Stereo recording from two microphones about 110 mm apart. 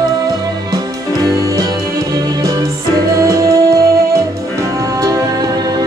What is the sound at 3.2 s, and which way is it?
Music, 30° right (ahead or behind).